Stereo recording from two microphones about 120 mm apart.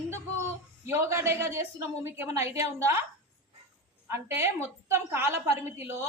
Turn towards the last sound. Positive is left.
turn(degrees=-20)  # may be behind; listen again after turning